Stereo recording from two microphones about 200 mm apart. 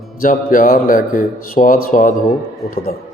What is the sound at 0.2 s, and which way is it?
A man's voice, 45° left (ahead or behind).